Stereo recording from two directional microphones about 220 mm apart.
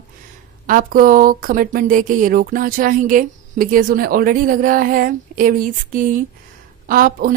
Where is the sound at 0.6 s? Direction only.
40° right (ahead or behind).